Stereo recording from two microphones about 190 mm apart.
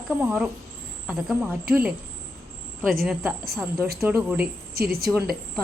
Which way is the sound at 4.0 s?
15° right (ahead or behind).